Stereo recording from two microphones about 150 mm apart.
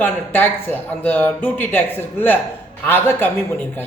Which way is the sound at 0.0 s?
15° left (ahead or behind).